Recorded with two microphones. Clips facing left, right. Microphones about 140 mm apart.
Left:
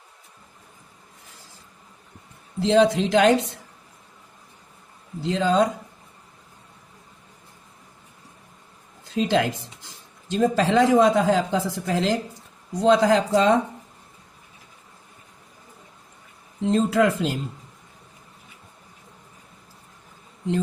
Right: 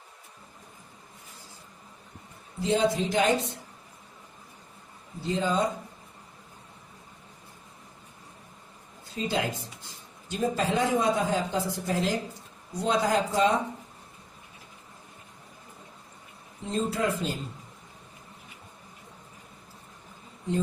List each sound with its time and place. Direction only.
2.6 s speech: 90° left
5.2 s speech: 90° left
9.1 s speech: 90° left
16.7 s speech: 90° left